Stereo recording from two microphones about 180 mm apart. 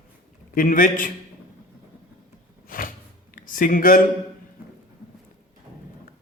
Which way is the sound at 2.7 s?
50° left (ahead or behind).